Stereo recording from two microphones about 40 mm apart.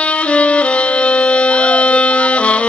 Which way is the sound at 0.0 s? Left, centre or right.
Left.